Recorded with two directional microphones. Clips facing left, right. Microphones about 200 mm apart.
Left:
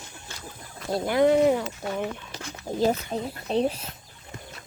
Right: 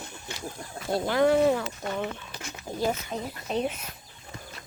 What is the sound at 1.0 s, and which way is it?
Speech, 20° left (ahead or behind).